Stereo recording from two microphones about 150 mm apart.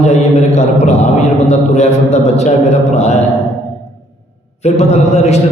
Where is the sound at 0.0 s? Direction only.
45° left (ahead or behind).